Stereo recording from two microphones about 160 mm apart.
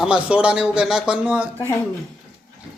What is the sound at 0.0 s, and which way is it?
Speech, 5° right (ahead or behind).